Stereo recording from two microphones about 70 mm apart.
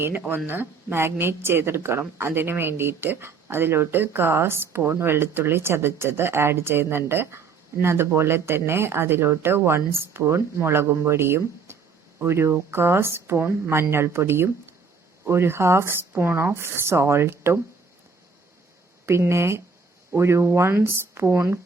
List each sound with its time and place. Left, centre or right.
0.3 s a woman's voice: right
19.0 s a woman's voice: right